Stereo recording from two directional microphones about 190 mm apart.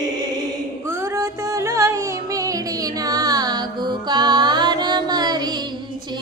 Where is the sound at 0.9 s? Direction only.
15° right (ahead or behind).